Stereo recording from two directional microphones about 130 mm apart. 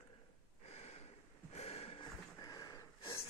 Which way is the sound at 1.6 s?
50° left (ahead or behind).